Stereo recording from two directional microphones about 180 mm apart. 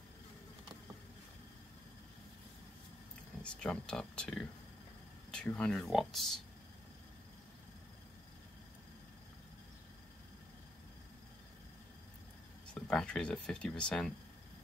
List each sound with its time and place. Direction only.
3.4 s speech: 5° left (ahead or behind)
12.7 s speech: 5° left (ahead or behind)